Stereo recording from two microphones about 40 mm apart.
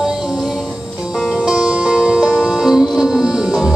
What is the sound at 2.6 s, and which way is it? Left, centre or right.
Music, centre.